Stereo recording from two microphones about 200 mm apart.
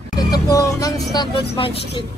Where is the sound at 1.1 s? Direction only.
25° left (ahead or behind).